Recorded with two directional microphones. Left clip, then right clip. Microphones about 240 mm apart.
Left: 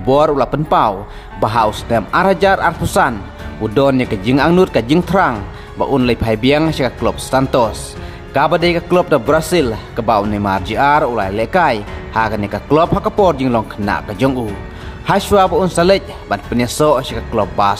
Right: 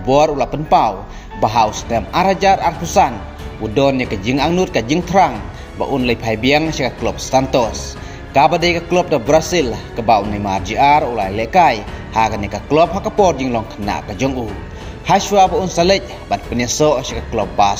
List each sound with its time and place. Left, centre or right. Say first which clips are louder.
0.0 s a man's voice: left 1 dB; left